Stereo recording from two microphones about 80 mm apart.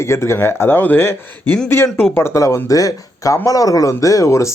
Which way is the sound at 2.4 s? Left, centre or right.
Left.